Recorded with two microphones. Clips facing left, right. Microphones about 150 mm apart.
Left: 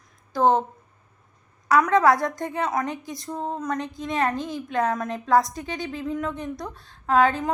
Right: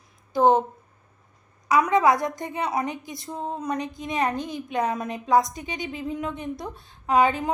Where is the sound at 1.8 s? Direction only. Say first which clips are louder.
Left 1 dB; 20° right (ahead or behind).